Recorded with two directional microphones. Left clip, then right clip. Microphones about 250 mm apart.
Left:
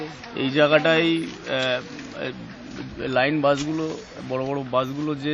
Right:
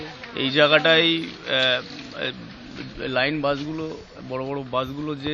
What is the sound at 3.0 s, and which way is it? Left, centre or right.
A man's voice, centre.